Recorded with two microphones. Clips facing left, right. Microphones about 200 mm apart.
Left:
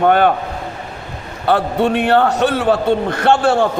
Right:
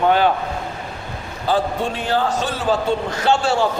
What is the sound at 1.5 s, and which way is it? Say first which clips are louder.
A man's voice: left 5 dB; 65° left (ahead or behind).